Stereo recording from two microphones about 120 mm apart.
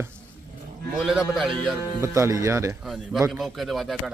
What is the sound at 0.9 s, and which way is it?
Speech, 5° right (ahead or behind).